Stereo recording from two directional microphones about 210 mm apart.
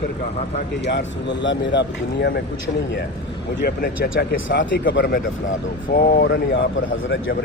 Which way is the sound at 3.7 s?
45° left (ahead or behind).